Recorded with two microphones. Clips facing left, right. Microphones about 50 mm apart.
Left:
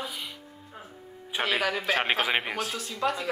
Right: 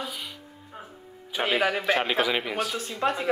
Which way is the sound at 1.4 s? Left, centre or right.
Right.